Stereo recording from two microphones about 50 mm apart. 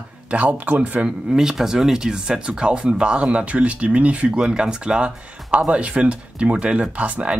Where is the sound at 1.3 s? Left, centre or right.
Centre.